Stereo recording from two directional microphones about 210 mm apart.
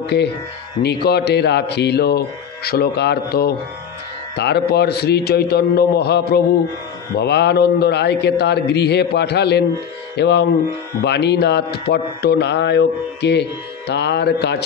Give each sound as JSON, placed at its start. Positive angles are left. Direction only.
{"t": 0.0, "sound": "speech", "side_deg": 55}